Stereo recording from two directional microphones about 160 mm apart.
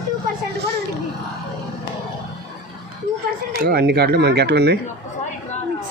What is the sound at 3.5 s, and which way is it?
Speech, 70° right (ahead or behind).